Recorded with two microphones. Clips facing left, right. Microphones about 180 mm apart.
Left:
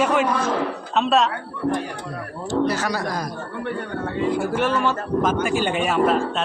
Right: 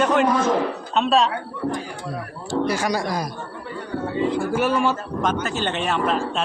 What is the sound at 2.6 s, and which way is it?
Speech, 10° right (ahead or behind).